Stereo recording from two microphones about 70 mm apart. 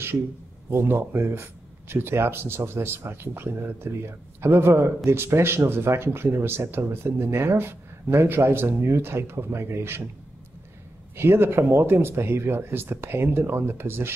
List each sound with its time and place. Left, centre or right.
0.7 s speech: right
11.1 s speech: right